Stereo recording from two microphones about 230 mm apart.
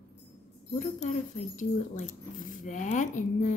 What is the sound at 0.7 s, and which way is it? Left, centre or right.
Speech, left.